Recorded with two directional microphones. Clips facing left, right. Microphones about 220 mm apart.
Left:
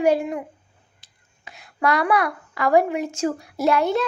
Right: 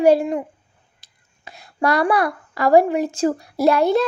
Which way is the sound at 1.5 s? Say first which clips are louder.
Right 2 dB; 35° right (ahead or behind).